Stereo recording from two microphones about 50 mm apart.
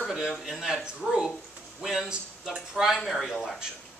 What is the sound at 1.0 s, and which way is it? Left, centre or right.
Speech, centre.